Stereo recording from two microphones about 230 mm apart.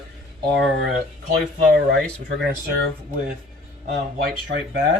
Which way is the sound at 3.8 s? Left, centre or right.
Right.